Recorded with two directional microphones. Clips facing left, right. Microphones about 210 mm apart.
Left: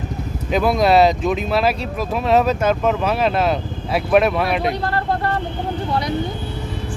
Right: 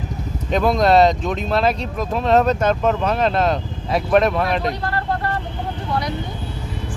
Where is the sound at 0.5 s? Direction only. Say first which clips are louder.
Even; 5° left (ahead or behind).